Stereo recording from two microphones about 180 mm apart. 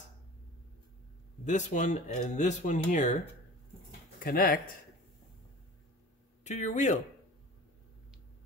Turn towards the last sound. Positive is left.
turn(degrees=40)  # may be behind; listen again after turning